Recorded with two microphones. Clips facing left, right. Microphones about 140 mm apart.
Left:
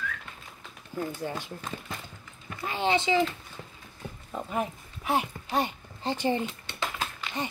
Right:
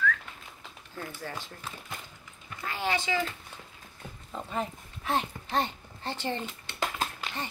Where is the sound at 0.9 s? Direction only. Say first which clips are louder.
Left 8 dB; 15° left (ahead or behind).